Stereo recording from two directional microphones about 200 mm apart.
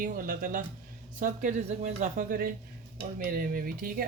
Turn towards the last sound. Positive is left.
turn(degrees=-45)  # may be behind; listen again after turning